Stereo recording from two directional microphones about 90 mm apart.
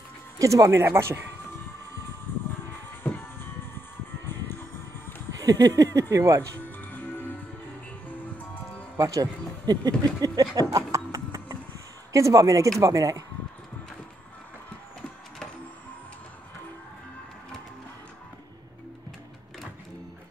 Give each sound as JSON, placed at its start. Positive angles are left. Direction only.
{"t": 0.4, "sound": "speech", "side_deg": -35}
{"t": 2.6, "sound": "music", "side_deg": 25}
{"t": 5.4, "sound": "speech", "side_deg": -40}
{"t": 6.9, "sound": "music", "side_deg": 20}
{"t": 8.9, "sound": "speech", "side_deg": -40}